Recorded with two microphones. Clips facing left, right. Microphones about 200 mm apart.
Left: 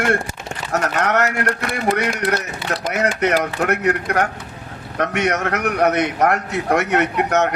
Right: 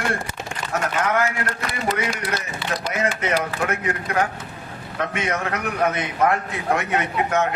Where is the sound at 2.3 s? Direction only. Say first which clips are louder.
Left 4 dB; 45° left (ahead or behind).